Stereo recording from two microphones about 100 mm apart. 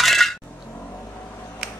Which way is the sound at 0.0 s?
Centre (ahead or behind).